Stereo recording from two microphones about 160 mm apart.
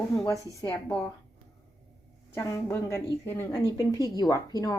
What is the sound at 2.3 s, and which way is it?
A woman's voice, 20° left (ahead or behind).